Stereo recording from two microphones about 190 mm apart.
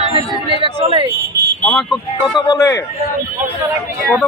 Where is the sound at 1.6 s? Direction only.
5° left (ahead or behind).